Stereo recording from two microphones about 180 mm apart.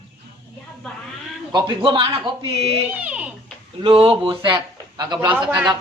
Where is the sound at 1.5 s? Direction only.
25° right (ahead or behind).